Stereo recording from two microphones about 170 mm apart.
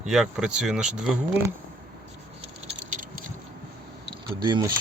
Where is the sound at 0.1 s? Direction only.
5° right (ahead or behind).